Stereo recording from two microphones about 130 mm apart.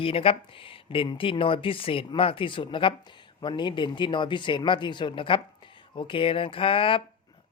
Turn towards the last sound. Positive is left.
turn(degrees=45)  # may be behind; listen again after turning